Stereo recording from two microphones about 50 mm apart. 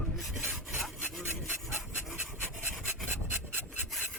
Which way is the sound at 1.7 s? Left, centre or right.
Right.